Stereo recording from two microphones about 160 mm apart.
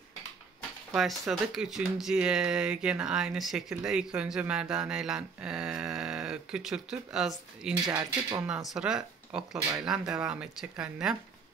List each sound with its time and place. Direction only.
0.9 s speech: centre (ahead or behind)
7.8 s speech: 25° right (ahead or behind)
8.7 s speech: 5° right (ahead or behind)